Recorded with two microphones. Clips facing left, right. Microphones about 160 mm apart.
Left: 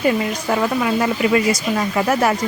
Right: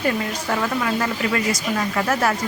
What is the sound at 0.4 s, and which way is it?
Speech, 15° left (ahead or behind).